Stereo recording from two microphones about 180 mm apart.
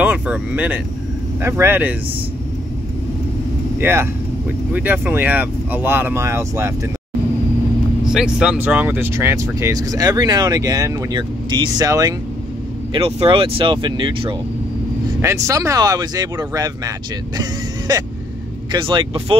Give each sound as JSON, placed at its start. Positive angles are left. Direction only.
{"t": 0.0, "sound": "a sound", "side_deg": -10}
{"t": 1.4, "sound": "speech", "side_deg": -10}
{"t": 3.8, "sound": "speech", "side_deg": -10}
{"t": 8.0, "sound": "speech", "side_deg": -5}